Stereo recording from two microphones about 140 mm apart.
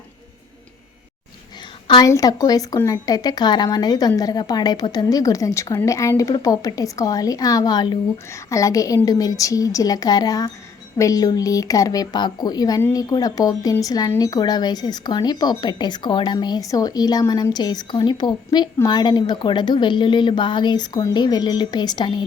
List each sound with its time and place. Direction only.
1.9 s speech: 25° left (ahead or behind)